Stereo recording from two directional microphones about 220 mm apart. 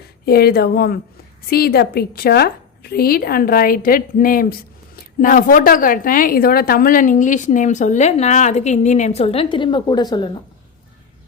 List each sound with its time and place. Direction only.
0.3 s a woman's voice: 45° left (ahead or behind); by 10.2 s 20° left (ahead or behind)